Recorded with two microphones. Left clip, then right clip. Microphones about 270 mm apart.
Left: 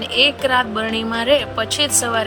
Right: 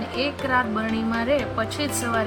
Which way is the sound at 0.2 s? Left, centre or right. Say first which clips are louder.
Left 8 dB; left.